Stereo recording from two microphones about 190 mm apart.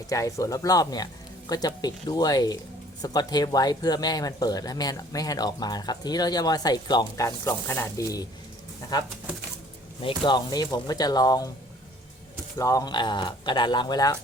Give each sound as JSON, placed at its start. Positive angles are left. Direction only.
{"t": 0.1, "sound": "speech", "side_deg": 15}
{"t": 10.0, "sound": "speech", "side_deg": 25}
{"t": 12.5, "sound": "speech", "side_deg": 15}